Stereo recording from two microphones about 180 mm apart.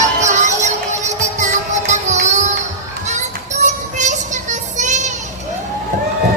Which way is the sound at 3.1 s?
40° right (ahead or behind).